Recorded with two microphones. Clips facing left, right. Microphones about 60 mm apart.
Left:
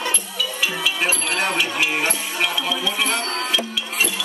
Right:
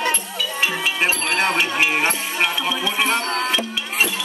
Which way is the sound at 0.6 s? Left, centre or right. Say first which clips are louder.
Right 2 dB; right.